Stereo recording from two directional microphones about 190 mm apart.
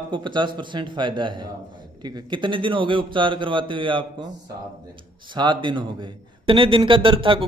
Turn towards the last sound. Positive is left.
turn(degrees=-25)  # may be behind; listen again after turning